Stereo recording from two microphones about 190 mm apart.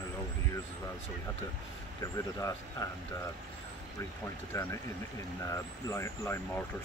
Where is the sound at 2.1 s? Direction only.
20° left (ahead or behind).